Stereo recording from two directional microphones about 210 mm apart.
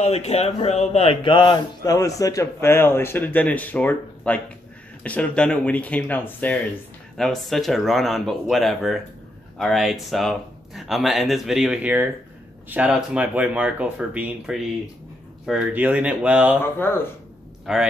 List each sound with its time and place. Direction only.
0.0 s a man's voice: 30° left (ahead or behind); by 16.5 s 5° right (ahead or behind)
17.7 s speech: centre (ahead or behind)